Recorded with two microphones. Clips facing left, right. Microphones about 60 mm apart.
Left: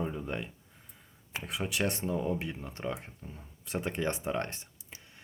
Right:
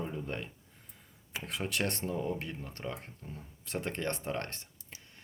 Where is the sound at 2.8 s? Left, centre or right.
Centre.